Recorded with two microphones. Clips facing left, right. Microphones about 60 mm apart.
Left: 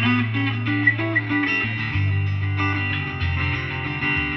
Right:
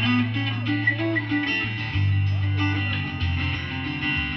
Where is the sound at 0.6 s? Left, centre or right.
Left.